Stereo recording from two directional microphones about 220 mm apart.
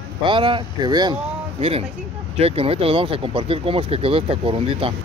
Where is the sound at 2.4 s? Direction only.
25° right (ahead or behind).